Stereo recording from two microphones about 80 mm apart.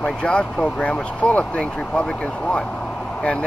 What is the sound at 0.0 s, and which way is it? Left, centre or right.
Speech, centre.